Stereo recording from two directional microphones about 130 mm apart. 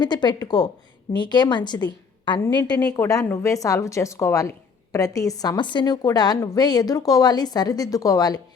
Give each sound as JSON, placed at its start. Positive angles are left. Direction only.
{"t": 0.0, "sound": "a woman's voice", "side_deg": 35}
{"t": 3.0, "sound": "a woman's voice", "side_deg": 20}